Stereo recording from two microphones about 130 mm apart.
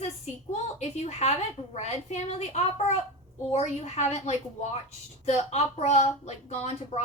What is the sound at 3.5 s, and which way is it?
A woman's voice, 60° left (ahead or behind).